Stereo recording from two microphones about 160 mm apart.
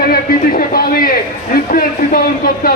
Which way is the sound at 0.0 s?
70° left (ahead or behind).